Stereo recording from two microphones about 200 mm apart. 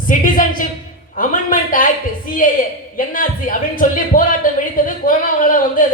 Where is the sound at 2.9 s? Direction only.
45° left (ahead or behind).